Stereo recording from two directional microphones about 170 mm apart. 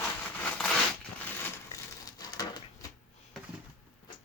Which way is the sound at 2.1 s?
20° left (ahead or behind).